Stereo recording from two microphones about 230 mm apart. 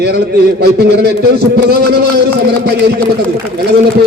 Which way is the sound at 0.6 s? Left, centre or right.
Right.